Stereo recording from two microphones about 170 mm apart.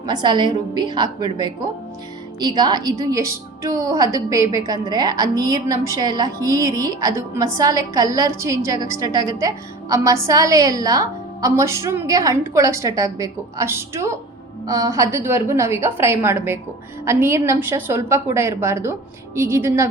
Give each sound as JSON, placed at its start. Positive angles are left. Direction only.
{"t": 0.0, "sound": "a woman's voice", "side_deg": -25}